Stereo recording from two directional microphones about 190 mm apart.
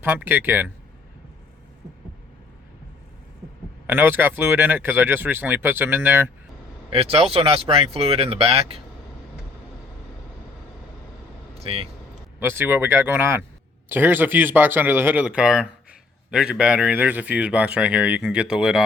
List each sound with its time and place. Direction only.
0.0 s speech: 10° right (ahead or behind)
3.8 s speech: 10° right (ahead or behind)
6.9 s speech: 30° right (ahead or behind)
11.6 s speech: 30° right (ahead or behind)
12.4 s a man's voice: 10° right (ahead or behind)